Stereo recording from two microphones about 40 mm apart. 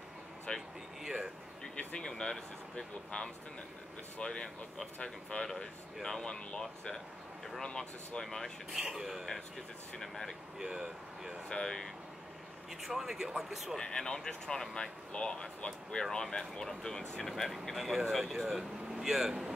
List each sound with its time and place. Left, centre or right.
0.5 s speech: left
1.0 s speech: centre
2.0 s speech: centre
8.2 s speech: centre
8.7 s speech: centre
9.9 s speech: centre
10.6 s speech: centre
11.4 s speech: left
12.8 s speech: centre
13.7 s speech: centre
17.2 s speech: centre